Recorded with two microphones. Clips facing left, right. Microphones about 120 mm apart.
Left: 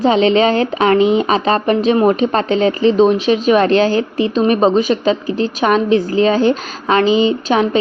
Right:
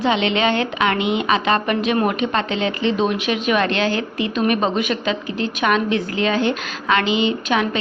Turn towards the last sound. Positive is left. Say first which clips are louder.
# left 6 dB
turn(degrees=35)  # may be behind; listen again after turning